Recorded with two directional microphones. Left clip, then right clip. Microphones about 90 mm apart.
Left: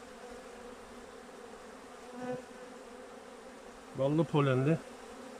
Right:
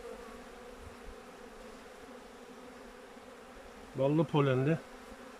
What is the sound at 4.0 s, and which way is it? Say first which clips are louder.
Insect: right 1 dB; 5° right (ahead or behind).